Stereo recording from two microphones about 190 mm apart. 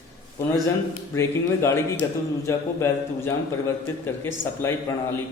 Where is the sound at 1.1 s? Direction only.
15° left (ahead or behind).